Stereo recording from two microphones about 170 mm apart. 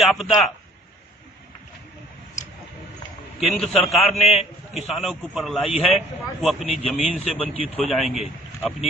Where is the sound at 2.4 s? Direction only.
45° left (ahead or behind).